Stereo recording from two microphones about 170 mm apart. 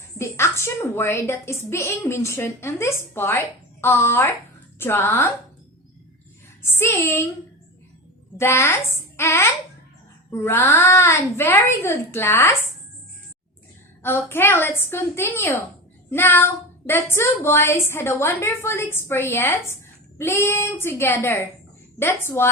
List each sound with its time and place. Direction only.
0.2 s a woman's voice: 15° left (ahead or behind)
6.6 s speech: 15° left (ahead or behind)
8.4 s speech: 15° left (ahead or behind)
14.0 s speech: 15° left (ahead or behind)